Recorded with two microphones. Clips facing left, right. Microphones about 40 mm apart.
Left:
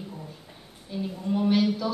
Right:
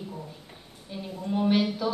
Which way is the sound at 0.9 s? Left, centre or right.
Centre.